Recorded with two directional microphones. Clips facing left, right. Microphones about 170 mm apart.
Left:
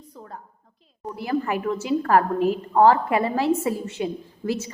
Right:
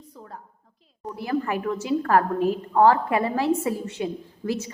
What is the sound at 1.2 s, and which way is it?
A woman's voice, 20° left (ahead or behind).